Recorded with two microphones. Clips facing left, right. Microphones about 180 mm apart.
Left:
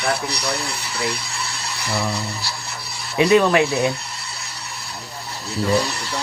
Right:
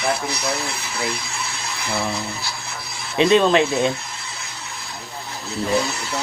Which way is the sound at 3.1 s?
20° right (ahead or behind).